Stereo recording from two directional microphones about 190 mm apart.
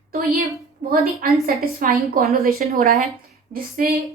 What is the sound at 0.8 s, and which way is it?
A woman's voice, 45° right (ahead or behind).